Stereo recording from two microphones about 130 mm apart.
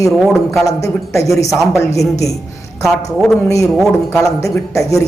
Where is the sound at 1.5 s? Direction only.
Centre (ahead or behind).